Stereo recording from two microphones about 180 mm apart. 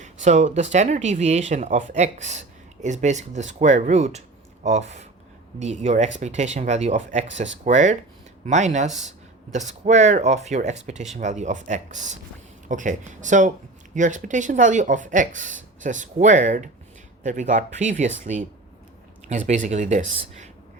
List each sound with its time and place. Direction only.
0.0 s speech: 40° right (ahead or behind)